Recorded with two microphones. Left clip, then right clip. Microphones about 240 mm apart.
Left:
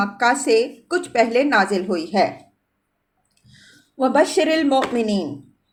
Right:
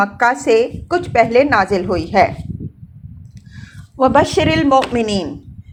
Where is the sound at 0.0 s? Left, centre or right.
Centre.